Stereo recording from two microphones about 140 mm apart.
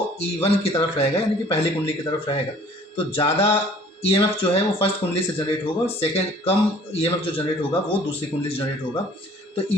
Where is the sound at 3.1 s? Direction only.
45° left (ahead or behind).